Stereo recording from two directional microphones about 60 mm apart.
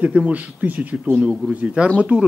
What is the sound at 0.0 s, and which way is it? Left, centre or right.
Speech, right.